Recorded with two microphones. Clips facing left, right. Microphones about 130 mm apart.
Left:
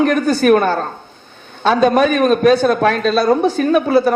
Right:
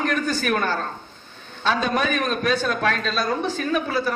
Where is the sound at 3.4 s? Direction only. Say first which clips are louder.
Left 10 dB; 60° left (ahead or behind).